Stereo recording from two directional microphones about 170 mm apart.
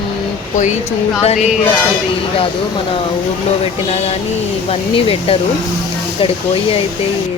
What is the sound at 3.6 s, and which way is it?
Speech, 40° left (ahead or behind).